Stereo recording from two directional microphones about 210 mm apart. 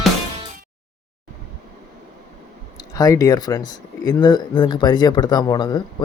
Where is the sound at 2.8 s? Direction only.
15° left (ahead or behind).